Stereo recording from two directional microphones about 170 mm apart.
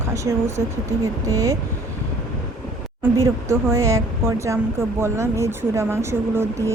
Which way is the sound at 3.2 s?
20° right (ahead or behind).